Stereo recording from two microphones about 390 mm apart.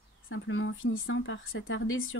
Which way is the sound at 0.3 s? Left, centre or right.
Left.